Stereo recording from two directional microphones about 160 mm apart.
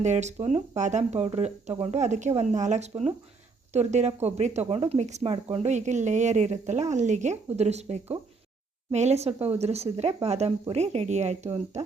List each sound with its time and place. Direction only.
0.0 s speech: 45° right (ahead or behind)